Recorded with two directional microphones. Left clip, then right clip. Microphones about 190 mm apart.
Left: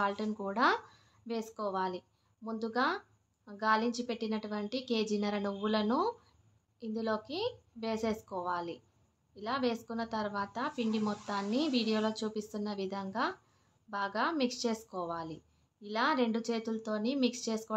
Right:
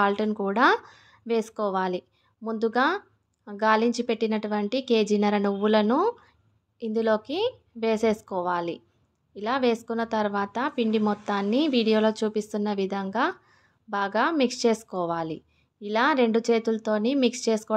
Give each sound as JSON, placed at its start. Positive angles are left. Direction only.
{"t": 0.0, "sound": "a woman's voice", "side_deg": -40}